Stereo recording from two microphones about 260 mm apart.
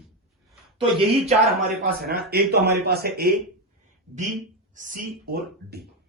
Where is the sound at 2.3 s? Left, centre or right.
Right.